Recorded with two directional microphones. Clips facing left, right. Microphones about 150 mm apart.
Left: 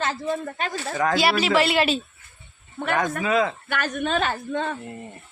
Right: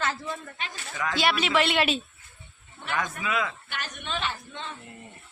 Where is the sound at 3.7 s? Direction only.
50° left (ahead or behind).